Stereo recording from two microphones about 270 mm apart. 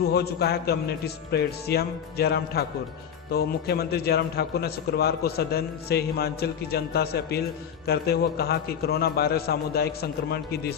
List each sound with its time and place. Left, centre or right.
0.1 s a man's voice: left